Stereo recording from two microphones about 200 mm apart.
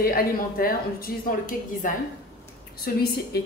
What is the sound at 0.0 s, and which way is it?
A woman's voice, 45° left (ahead or behind).